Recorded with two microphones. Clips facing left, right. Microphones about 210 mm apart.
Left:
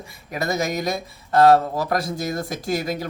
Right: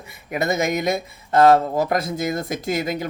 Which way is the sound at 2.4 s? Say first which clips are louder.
Right 1 dB; centre (ahead or behind).